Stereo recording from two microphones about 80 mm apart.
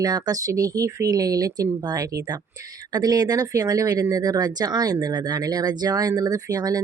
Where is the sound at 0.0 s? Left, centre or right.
Right.